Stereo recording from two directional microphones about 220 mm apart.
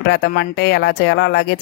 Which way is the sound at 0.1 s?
50° left (ahead or behind).